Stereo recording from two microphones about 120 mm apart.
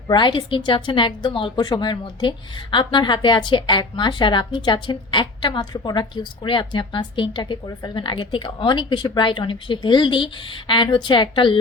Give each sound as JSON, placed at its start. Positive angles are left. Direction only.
{"t": 0.1, "sound": "a woman's voice", "side_deg": 40}